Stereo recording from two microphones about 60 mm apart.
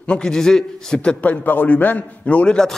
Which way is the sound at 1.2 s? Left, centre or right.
Left.